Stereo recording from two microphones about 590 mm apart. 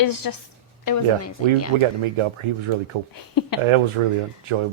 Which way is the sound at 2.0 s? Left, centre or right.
Right.